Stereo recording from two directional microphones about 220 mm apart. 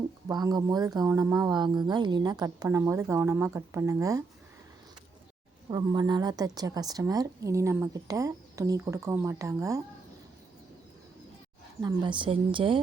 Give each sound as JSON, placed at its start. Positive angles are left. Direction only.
{"t": 0.3, "sound": "a woman's voice", "side_deg": -20}
{"t": 5.7, "sound": "a woman's voice", "side_deg": -20}
{"t": 11.8, "sound": "speech", "side_deg": -20}